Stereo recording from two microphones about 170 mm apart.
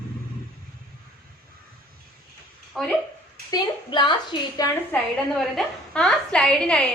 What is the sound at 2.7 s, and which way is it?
Speech, centre (ahead or behind).